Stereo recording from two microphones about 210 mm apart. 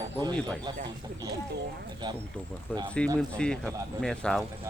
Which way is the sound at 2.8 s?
5° left (ahead or behind).